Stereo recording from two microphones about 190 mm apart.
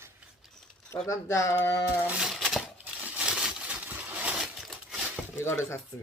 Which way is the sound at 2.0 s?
5° right (ahead or behind).